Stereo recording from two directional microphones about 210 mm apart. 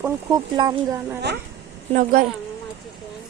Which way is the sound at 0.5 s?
20° right (ahead or behind).